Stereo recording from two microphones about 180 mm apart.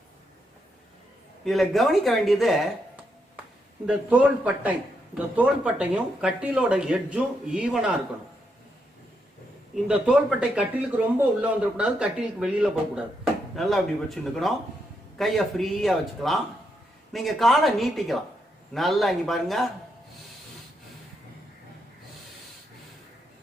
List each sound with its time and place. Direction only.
1.5 s a man's voice: centre (ahead or behind)
9.8 s speech: 5° right (ahead or behind)